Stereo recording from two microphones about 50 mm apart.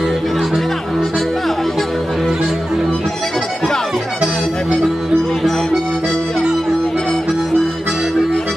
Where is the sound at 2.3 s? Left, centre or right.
Centre.